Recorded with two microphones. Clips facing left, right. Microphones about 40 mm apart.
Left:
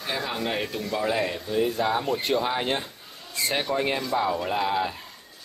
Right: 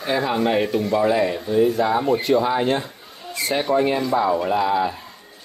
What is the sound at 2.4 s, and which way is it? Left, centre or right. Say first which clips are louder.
Speech: right 6 dB; centre.